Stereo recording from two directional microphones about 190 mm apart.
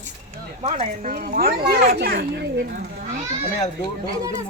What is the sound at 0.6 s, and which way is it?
A child's voice, 35° right (ahead or behind).